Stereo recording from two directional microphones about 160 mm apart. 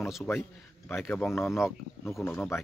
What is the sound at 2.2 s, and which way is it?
Speech, 10° left (ahead or behind).